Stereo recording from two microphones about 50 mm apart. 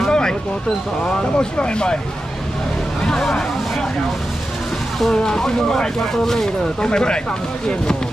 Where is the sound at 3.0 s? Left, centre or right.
Centre.